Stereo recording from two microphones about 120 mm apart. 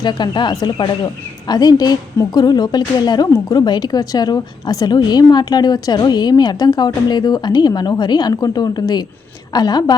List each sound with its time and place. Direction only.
0.0 s speech: 40° left (ahead or behind)